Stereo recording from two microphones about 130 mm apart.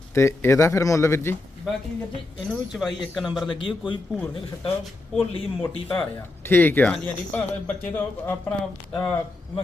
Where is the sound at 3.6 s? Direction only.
40° left (ahead or behind).